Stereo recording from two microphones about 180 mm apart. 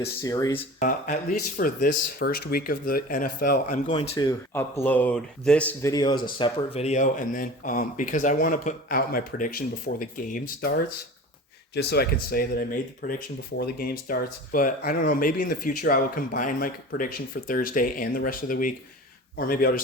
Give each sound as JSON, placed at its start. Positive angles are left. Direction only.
{"t": 0.2, "sound": "speech", "side_deg": 20}
{"t": 0.8, "sound": "speech", "side_deg": 45}
{"t": 3.9, "sound": "speech", "side_deg": 30}
{"t": 4.3, "sound": "speech", "side_deg": 15}
{"t": 5.9, "sound": "speech", "side_deg": 25}
{"t": 11.7, "sound": "speech", "side_deg": 65}